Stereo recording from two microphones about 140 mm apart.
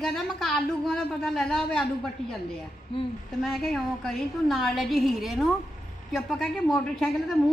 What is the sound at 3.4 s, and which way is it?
A woman's voice, centre (ahead or behind).